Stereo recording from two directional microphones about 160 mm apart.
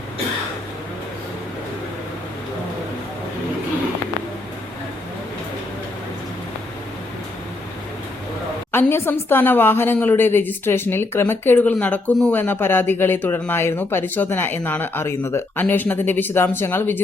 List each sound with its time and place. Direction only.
8.7 s speech: 15° left (ahead or behind)